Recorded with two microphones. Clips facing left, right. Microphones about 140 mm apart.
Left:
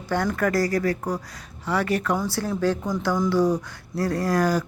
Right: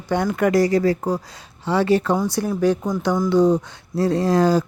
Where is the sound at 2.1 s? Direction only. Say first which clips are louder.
Right 4 dB; 15° right (ahead or behind).